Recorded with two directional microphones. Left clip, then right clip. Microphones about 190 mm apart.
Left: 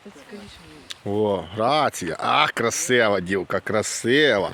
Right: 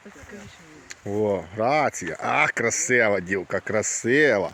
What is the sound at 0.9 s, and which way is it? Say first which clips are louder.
Speech: left 2 dB; 10° left (ahead or behind).